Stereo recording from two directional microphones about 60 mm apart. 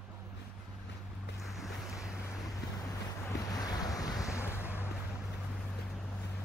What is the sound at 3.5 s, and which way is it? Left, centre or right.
Wind, left.